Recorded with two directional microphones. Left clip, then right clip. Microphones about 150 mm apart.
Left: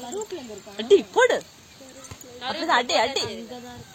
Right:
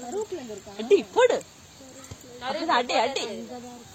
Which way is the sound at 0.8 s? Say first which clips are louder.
Left 2 dB; 35° left (ahead or behind).